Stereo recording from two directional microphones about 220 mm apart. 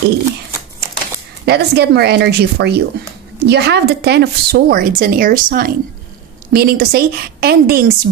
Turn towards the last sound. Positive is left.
turn(degrees=-45)  # may be behind; listen again after turning